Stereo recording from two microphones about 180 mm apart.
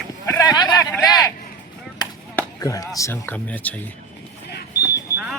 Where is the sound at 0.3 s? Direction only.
20° left (ahead or behind).